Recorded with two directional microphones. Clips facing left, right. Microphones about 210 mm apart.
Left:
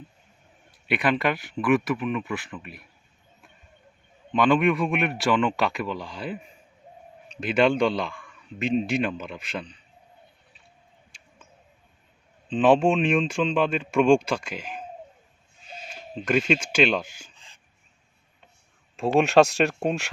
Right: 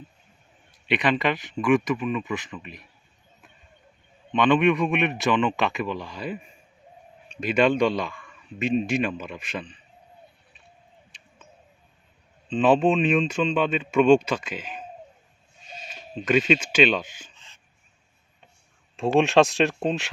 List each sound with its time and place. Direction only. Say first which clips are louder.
0.9 s a man's voice: right 1 dB; 5° left (ahead or behind)
4.6 s a man's voice: right 2 dB; centre (ahead or behind)
5.3 s speech: left 2 dB; 15° right (ahead or behind)
6.1 s a man's voice: right 1 dB; centre (ahead or behind)
12.5 s a man's voice: even; centre (ahead or behind)
16.2 s a man's voice: right 2 dB; centre (ahead or behind)
18.9 s a man's voice: even; centre (ahead or behind)